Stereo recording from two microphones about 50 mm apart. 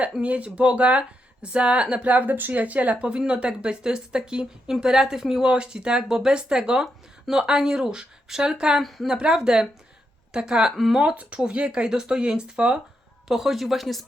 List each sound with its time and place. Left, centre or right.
0.2 s speech: right
8.8 s speech: centre
9.0 s speech: centre
11.2 s speech: right; by 14.0 s centre